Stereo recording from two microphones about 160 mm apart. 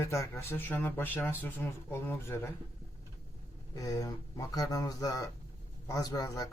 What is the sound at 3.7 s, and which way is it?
Speech, 20° left (ahead or behind).